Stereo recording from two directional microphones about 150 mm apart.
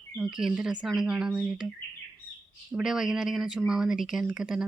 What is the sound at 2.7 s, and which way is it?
Speech, 5° right (ahead or behind).